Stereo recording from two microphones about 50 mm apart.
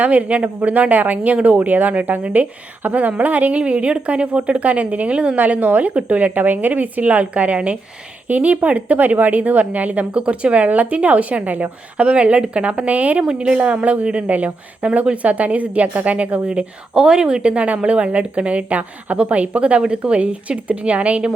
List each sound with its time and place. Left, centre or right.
0.0 s speech: right
5.4 s a woman's voice: right